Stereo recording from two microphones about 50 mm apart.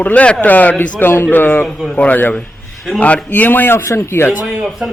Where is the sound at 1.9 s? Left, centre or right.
Left.